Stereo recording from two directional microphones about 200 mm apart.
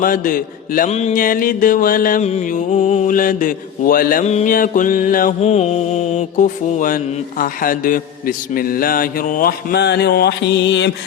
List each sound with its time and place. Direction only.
0.0 s mantra: 45° left (ahead or behind); by 10.9 s 60° left (ahead or behind)